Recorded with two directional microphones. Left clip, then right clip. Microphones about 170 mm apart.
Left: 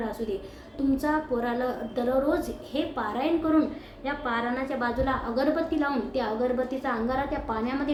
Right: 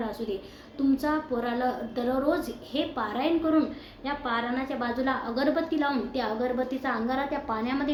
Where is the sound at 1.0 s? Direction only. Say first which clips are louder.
Left 2 dB; 15° right (ahead or behind).